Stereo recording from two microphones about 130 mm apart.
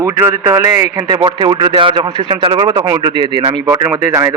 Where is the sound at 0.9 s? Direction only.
30° right (ahead or behind).